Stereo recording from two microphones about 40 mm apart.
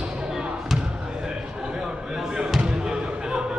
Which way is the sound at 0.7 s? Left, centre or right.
Centre.